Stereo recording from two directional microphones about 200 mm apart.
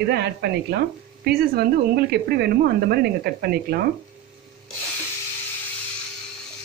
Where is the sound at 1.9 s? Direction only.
55° right (ahead or behind).